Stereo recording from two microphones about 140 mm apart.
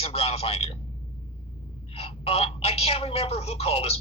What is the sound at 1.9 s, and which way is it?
A man's voice, 45° left (ahead or behind).